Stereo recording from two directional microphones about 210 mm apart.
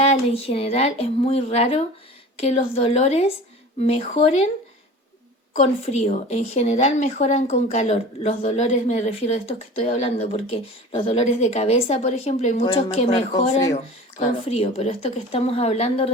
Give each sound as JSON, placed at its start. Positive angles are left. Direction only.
{"t": 0.0, "sound": "speech", "side_deg": 30}
{"t": 5.8, "sound": "speech", "side_deg": 30}